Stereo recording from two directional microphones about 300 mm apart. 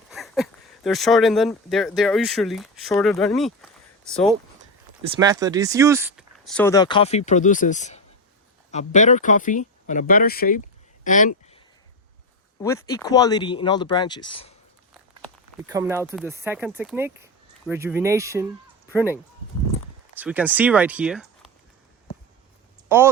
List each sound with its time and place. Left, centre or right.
0.1 s a sound: centre
0.9 s speech: centre
5.1 s speech: centre; by 10.6 s left
11.0 s a sound: left
12.6 s speech: centre
15.6 s speech: centre
20.1 s speech: centre
22.9 s speech: centre